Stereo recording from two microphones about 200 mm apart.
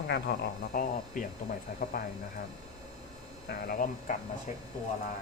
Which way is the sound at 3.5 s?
50° left (ahead or behind).